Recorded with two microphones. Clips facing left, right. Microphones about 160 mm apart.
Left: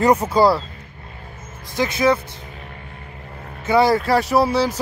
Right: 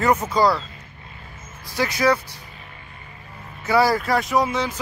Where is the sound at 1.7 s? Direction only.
20° left (ahead or behind).